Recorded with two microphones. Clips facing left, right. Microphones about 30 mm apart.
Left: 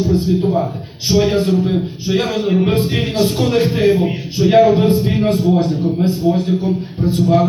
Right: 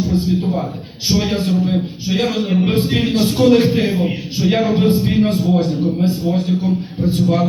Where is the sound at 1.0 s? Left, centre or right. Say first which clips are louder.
Left 3 dB; centre.